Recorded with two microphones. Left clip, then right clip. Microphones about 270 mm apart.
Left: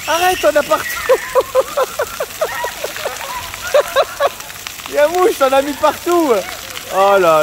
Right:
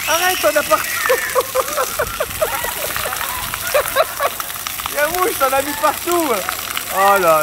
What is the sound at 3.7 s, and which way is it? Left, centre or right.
Speech, left.